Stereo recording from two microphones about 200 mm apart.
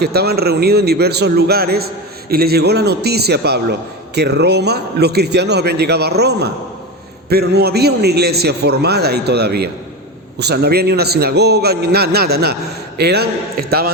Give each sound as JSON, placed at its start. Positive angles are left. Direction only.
{"t": 0.0, "sound": "a man's voice", "side_deg": -50}